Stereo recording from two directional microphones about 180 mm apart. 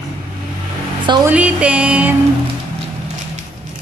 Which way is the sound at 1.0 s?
25° right (ahead or behind).